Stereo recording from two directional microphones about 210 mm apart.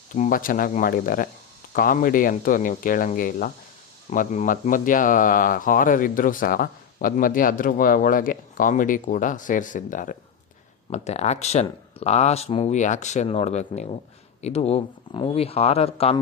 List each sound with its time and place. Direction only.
0.1 s speech: 40° left (ahead or behind)